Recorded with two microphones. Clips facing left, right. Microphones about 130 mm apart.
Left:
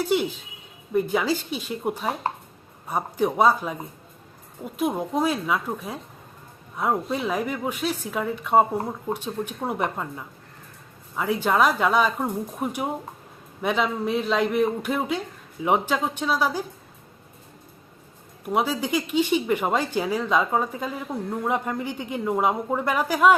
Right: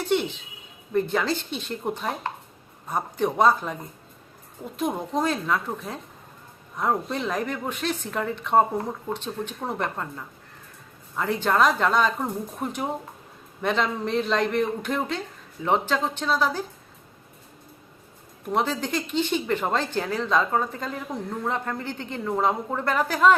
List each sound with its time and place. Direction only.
0.0 s a woman's voice: 5° left (ahead or behind)
18.4 s speech: 10° left (ahead or behind)